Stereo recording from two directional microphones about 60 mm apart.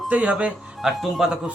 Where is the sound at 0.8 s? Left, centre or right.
Centre.